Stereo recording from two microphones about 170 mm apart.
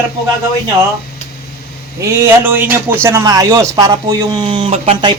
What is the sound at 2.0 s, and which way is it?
A man's voice, 20° right (ahead or behind).